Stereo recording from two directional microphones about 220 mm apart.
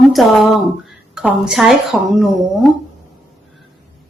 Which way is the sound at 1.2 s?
Centre (ahead or behind).